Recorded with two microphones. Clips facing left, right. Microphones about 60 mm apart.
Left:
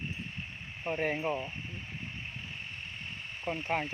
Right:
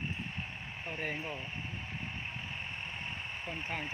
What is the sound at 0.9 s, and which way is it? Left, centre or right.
Speech, left.